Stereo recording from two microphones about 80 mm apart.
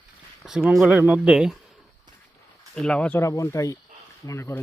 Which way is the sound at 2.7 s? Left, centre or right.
Centre.